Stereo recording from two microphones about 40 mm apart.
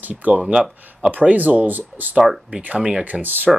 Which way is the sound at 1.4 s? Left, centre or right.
Right.